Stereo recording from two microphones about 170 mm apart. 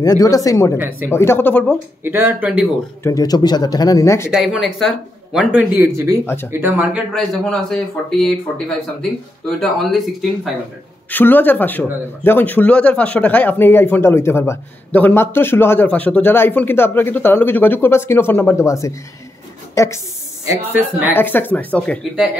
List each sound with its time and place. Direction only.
0.0 s speech: 20° left (ahead or behind)
2.0 s speech: 10° right (ahead or behind)
3.0 s speech: 20° left (ahead or behind)
4.3 s speech: 5° right (ahead or behind)
6.2 s speech: 15° left (ahead or behind)
6.5 s speech: 10° right (ahead or behind)
7.4 s speech: 5° left (ahead or behind)
11.1 s speech: 10° left (ahead or behind)
20.4 s speech: 10° right (ahead or behind)
21.1 s speech: 10° left (ahead or behind)